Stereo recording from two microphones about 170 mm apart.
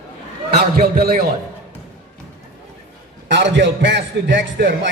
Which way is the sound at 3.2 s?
90° right.